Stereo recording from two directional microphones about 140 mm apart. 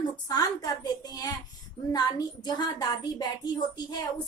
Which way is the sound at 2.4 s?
30° left (ahead or behind).